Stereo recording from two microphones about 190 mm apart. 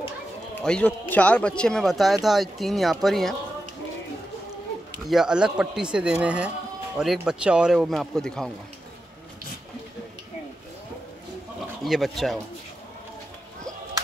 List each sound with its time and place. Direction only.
0.6 s speech: 5° left (ahead or behind)
5.0 s speech: 5° right (ahead or behind)
11.8 s speech: centre (ahead or behind)